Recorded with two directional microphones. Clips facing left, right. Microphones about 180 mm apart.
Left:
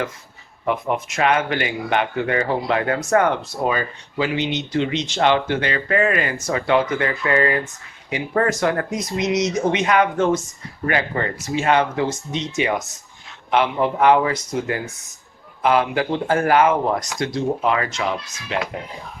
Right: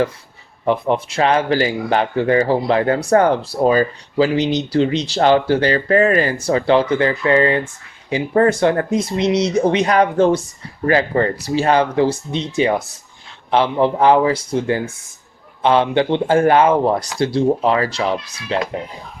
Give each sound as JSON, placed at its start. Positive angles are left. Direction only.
{"t": 0.6, "sound": "speech", "side_deg": -30}